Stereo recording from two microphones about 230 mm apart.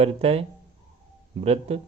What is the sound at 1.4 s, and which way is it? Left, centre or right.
Speech, right.